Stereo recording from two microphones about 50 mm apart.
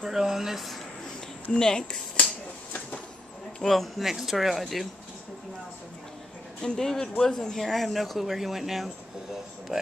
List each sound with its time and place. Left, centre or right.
0.0 s speech: centre
1.5 s speech: centre
3.6 s speech: centre
6.6 s speech: centre